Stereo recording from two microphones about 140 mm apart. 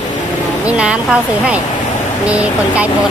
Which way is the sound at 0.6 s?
10° right (ahead or behind).